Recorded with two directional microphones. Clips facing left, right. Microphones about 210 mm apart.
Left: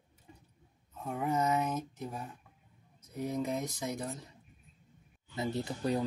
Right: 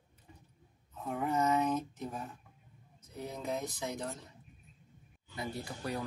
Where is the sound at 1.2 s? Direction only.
15° left (ahead or behind).